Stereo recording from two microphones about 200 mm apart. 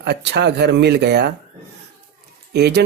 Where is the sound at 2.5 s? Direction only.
55° right (ahead or behind).